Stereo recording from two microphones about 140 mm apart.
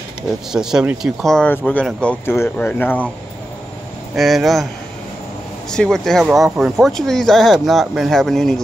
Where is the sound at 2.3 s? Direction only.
15° left (ahead or behind).